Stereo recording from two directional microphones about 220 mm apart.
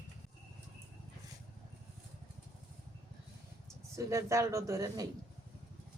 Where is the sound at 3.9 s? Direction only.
15° right (ahead or behind).